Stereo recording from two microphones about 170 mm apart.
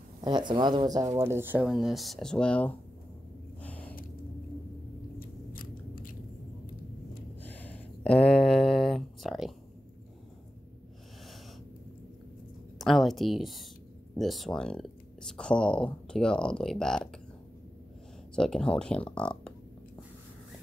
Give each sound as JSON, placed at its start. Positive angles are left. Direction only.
{"t": 0.2, "sound": "speech", "side_deg": -25}
{"t": 3.6, "sound": "gasp", "side_deg": 10}
{"t": 5.2, "sound": "biting", "side_deg": 55}
{"t": 7.4, "sound": "a sound", "side_deg": 10}
{"t": 12.7, "sound": "a sound", "side_deg": 0}
{"t": 14.1, "sound": "speech", "side_deg": 0}
{"t": 18.3, "sound": "speech", "side_deg": 5}